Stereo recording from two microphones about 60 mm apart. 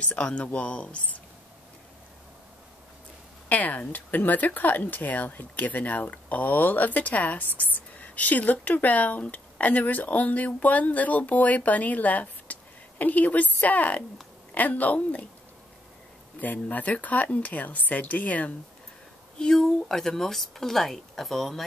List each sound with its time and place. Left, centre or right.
0.0 s speech: left
3.4 s speech: left
16.3 s speech: left
19.3 s speech: centre